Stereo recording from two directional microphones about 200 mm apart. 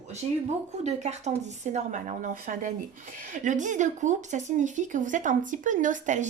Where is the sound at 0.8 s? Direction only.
35° right (ahead or behind).